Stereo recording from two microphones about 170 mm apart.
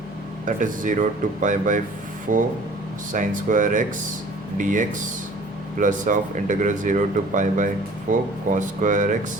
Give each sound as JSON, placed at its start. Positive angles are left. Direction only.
{"t": 0.4, "sound": "speech", "side_deg": -50}